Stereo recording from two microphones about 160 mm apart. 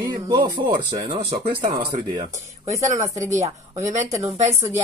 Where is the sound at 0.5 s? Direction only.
30° right (ahead or behind).